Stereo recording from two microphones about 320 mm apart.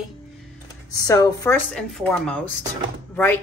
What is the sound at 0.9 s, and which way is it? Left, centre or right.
A woman's voice, centre.